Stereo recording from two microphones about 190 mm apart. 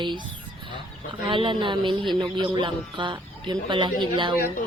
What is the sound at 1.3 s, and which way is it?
A man's voice, 25° right (ahead or behind).